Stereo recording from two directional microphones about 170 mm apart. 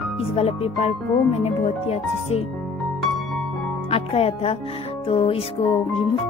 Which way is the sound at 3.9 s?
40° left (ahead or behind).